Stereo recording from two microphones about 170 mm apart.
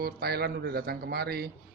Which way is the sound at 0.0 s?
65° right (ahead or behind).